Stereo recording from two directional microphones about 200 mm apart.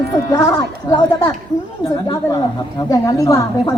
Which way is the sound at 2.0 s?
20° left (ahead or behind).